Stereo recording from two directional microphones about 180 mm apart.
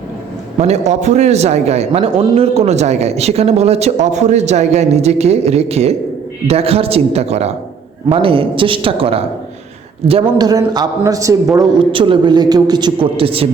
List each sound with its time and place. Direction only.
0.6 s a man's voice: 40° right (ahead or behind)